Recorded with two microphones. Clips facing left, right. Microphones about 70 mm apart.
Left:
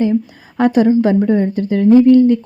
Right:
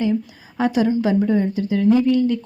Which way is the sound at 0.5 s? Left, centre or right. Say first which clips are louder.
Left 7 dB; left.